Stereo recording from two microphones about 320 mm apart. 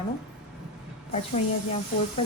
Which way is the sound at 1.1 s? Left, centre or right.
Centre.